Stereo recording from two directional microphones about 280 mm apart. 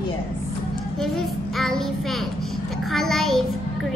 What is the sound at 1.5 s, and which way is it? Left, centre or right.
Speech, centre.